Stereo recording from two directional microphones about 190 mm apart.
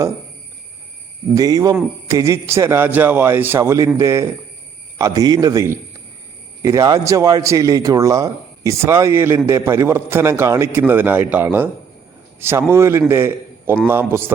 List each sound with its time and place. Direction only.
1.4 s a man's voice: 20° right (ahead or behind)